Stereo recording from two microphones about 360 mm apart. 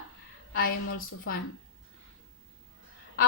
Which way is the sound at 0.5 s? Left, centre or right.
Left.